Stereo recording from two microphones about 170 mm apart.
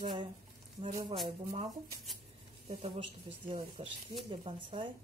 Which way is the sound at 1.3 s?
35° right (ahead or behind).